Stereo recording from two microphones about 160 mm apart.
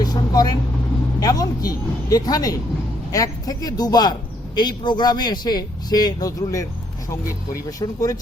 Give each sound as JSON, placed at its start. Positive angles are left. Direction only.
{"t": 0.0, "sound": "vehicle", "side_deg": 25}
{"t": 1.2, "sound": "speech", "side_deg": 25}